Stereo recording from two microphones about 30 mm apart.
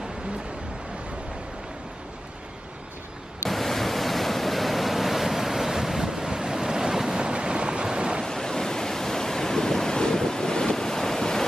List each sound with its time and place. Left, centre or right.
3.4 s waves: centre
7.2 s waves: right
8.3 s waves: centre